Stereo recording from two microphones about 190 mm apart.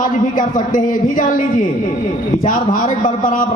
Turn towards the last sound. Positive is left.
turn(degrees=45)  # may be behind; listen again after turning